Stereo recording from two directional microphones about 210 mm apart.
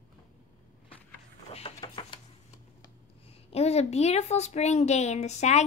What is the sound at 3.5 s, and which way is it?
Speech, 30° left (ahead or behind).